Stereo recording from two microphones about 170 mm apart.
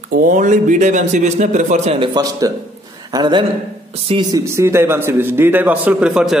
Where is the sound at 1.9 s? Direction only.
25° right (ahead or behind).